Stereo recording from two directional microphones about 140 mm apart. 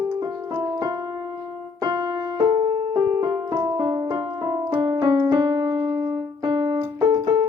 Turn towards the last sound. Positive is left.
turn(degrees=-30)  # may be behind; listen again after turning